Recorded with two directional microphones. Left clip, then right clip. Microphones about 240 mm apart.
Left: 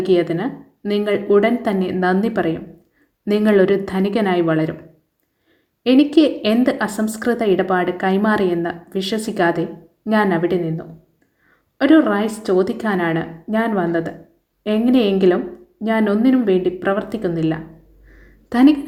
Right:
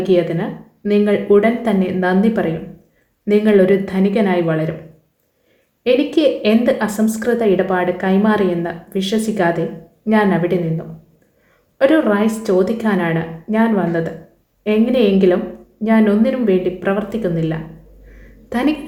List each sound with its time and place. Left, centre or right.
0.0 s a woman's voice: left
5.8 s a woman's voice: left